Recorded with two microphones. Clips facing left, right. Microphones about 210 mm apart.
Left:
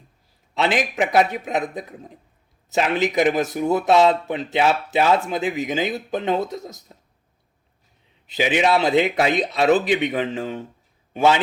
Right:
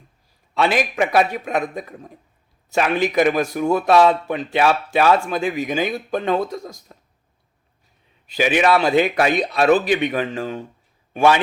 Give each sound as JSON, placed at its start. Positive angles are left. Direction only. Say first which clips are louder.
{"t": 0.5, "sound": "a man's voice", "louder": "right 2 dB", "side_deg": 20}
{"t": 8.3, "sound": "a man's voice", "louder": "right 2 dB", "side_deg": 20}